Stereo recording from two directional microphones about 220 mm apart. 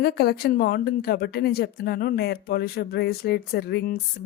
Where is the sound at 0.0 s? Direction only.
45° left (ahead or behind).